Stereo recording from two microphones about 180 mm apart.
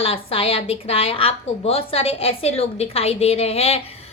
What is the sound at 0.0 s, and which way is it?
A woman's voice, 30° left (ahead or behind).